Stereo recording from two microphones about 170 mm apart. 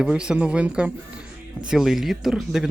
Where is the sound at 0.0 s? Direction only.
5° right (ahead or behind).